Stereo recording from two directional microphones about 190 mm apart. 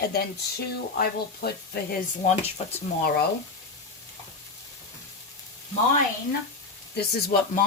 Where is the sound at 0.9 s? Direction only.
55° left (ahead or behind).